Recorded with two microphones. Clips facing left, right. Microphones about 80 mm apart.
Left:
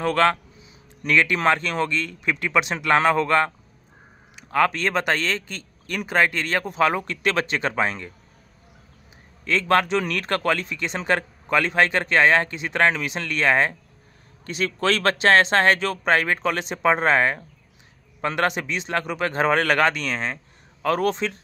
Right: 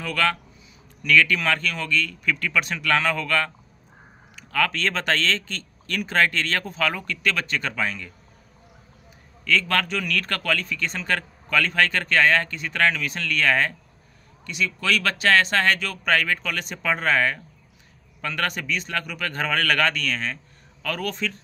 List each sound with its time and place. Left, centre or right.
0.0 s a man's voice: left
4.7 s speech: centre
6.8 s speech: left
9.4 s a man's voice: left
14.4 s a man's voice: left